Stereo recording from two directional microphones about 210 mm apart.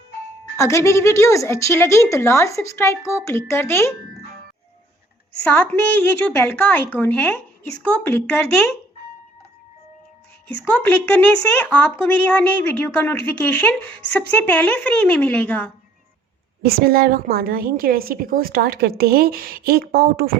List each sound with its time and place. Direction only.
0.5 s a woman's voice: 15° left (ahead or behind)
5.4 s a woman's voice: 5° left (ahead or behind)
10.8 s a woman's voice: 10° left (ahead or behind)
16.6 s a woman's voice: 45° right (ahead or behind)